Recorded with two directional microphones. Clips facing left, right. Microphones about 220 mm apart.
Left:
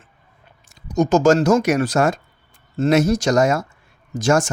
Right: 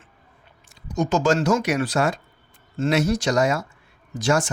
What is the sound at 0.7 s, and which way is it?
Speech, 45° left (ahead or behind).